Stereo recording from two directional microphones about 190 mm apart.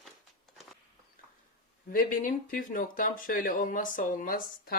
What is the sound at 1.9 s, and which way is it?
Speech, 45° left (ahead or behind).